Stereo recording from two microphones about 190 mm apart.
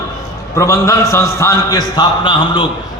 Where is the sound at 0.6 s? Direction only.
15° left (ahead or behind).